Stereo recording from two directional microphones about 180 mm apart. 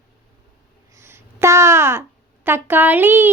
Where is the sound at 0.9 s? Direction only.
15° right (ahead or behind).